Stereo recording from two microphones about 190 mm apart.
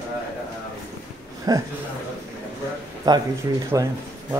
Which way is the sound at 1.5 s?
20° right (ahead or behind).